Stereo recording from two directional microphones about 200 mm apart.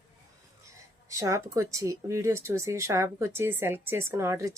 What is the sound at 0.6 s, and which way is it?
Speech, 15° right (ahead or behind).